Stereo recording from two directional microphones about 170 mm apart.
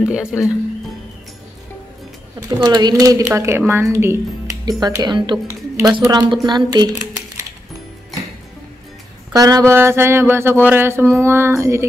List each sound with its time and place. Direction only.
0.3 s speech: centre (ahead or behind)
2.6 s speech: 25° right (ahead or behind)
9.3 s speech: 20° right (ahead or behind)